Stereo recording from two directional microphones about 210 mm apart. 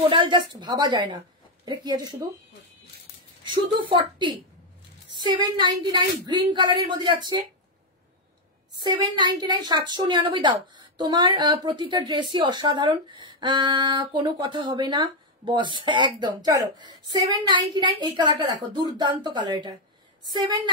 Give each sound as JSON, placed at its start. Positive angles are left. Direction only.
{"t": 0.1, "sound": "a woman's voice", "side_deg": -25}
{"t": 5.1, "sound": "a woman's voice", "side_deg": -20}
{"t": 8.7, "sound": "a woman's voice", "side_deg": -20}